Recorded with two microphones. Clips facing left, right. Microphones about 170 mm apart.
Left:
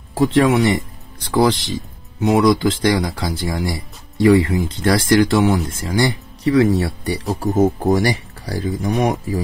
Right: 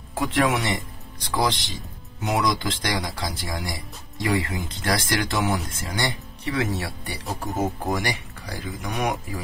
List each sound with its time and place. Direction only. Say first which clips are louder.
0.1 s speech: left 8 dB; 30° left (ahead or behind)